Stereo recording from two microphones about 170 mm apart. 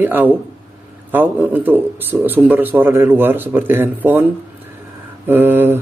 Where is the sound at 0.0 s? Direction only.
10° right (ahead or behind).